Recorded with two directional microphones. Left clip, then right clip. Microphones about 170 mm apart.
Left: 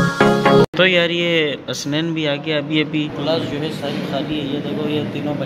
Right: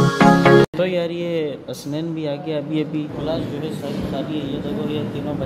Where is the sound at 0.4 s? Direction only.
5° right (ahead or behind).